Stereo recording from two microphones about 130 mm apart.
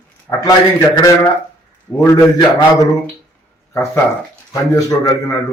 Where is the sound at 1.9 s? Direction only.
25° left (ahead or behind).